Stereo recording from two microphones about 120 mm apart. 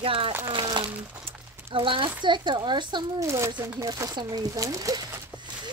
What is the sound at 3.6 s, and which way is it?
Speech, 25° right (ahead or behind).